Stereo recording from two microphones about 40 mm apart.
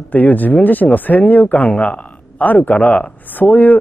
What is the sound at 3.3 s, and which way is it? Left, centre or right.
Speech, left.